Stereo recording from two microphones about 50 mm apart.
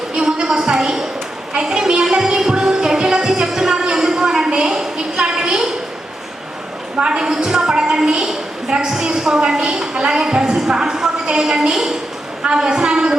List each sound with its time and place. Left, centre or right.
0.1 s a sound: centre
1.5 s music: centre
7.0 s a woman's voice: centre